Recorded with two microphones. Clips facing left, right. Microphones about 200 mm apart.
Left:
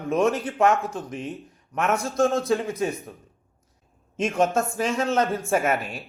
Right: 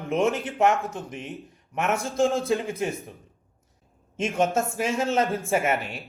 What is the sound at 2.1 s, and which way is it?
Speech, 30° right (ahead or behind).